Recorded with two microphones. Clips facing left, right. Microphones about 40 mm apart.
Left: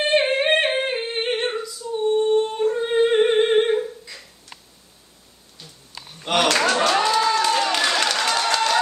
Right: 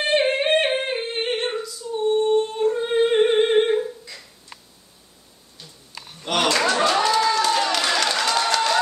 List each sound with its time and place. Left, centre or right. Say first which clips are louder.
0.0 s singing: left 1 dB; centre
2.6 s humming: left 1 dB; centre
6.2 s clapping: left 2 dB; left
6.9 s a sound: even; centre